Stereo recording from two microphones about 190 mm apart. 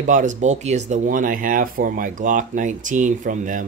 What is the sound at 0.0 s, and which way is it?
Speech, 40° right (ahead or behind).